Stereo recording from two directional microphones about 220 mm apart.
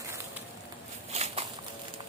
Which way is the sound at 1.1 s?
30° right (ahead or behind).